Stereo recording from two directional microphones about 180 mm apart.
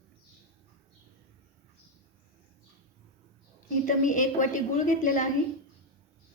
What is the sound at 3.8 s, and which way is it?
A woman's voice, 45° left (ahead or behind).